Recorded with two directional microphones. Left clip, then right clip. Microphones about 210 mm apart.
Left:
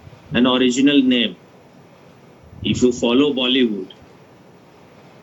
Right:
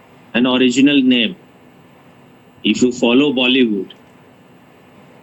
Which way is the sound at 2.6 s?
50° right (ahead or behind).